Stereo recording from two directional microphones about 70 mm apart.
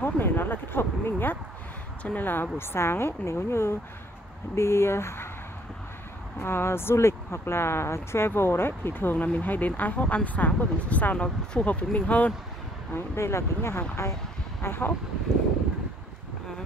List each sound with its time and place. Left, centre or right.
0.0 s a woman's voice: left
6.4 s speech: left
12.9 s a woman's voice: left
14.6 s speech: left